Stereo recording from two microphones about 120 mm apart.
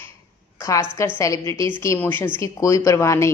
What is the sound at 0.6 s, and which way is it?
A woman's voice, 25° left (ahead or behind).